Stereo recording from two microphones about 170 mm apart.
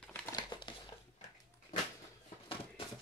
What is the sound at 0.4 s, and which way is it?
Crumpling, 25° left (ahead or behind).